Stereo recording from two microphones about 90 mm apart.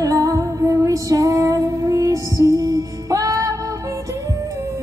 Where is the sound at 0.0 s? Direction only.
40° right (ahead or behind).